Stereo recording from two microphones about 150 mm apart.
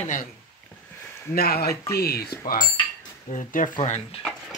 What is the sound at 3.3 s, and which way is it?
Speech, 60° left (ahead or behind).